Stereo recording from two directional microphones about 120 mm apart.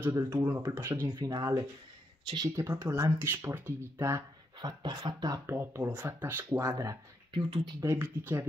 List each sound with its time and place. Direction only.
0.0 s speech: 25° right (ahead or behind)
4.6 s speech: 35° right (ahead or behind)
5.5 s speech: 20° right (ahead or behind)
7.4 s speech: 45° right (ahead or behind)
7.8 s speech: 20° right (ahead or behind)